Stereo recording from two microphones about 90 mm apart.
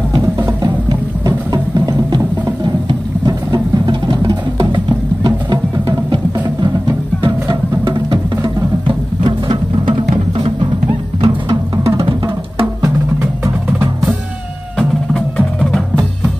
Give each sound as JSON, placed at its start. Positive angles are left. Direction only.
{"t": 3.3, "sound": "vehicle", "side_deg": -50}
{"t": 4.7, "sound": "music", "side_deg": -50}
{"t": 7.2, "sound": "music", "side_deg": -60}
{"t": 11.1, "sound": "music", "side_deg": -50}
{"t": 14.8, "sound": "percussion", "side_deg": 5}